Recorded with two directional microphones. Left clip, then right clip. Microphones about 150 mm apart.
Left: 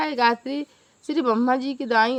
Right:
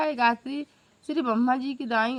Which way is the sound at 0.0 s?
35° right (ahead or behind).